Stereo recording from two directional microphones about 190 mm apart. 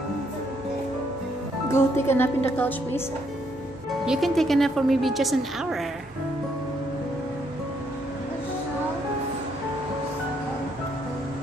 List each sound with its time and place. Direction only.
1.7 s speech: 10° left (ahead or behind)
4.0 s speech: centre (ahead or behind)